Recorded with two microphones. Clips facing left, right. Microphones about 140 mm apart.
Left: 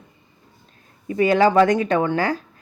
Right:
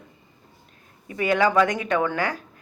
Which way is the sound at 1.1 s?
30° left (ahead or behind).